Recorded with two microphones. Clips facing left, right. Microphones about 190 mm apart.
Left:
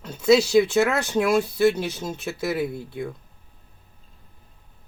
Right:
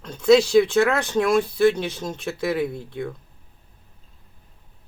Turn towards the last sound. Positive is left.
turn(degrees=5)  # may be behind; listen again after turning